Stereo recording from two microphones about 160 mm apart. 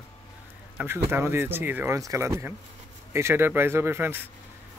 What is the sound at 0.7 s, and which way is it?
Speech, 15° right (ahead or behind).